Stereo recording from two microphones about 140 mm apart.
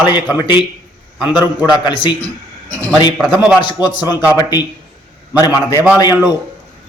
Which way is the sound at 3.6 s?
30° left (ahead or behind).